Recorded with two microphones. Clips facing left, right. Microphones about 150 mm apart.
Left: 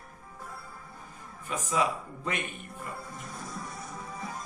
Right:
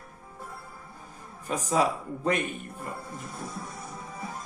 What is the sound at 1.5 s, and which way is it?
Speech, 40° right (ahead or behind).